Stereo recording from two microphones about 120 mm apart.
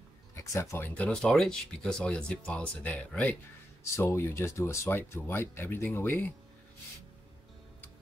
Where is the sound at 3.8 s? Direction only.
20° left (ahead or behind).